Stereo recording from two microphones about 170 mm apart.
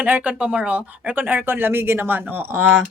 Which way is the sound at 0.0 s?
10° right (ahead or behind).